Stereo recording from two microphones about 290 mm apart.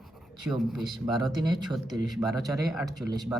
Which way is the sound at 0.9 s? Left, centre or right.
Left.